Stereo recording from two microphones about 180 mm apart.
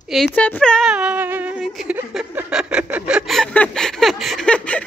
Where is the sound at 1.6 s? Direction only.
Centre (ahead or behind).